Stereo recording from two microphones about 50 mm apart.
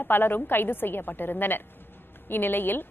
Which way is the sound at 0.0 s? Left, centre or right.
Left.